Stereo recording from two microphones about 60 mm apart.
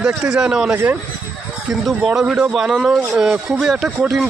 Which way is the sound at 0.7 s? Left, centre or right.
Right.